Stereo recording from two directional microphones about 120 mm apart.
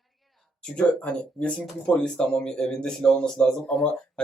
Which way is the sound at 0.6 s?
10° left (ahead or behind).